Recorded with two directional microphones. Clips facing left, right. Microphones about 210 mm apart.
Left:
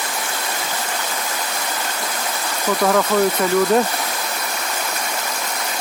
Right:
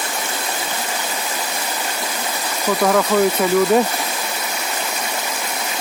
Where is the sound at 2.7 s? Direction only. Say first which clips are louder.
Right 1 dB; 5° right (ahead or behind).